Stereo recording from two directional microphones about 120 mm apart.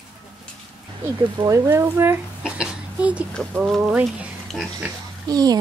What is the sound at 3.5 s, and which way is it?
Speech, centre (ahead or behind).